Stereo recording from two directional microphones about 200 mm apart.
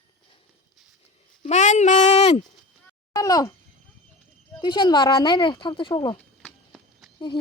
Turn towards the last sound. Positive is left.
turn(degrees=20)  # may be behind; listen again after turning